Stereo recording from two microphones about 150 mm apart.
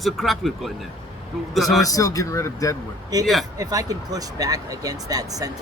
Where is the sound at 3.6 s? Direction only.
25° right (ahead or behind).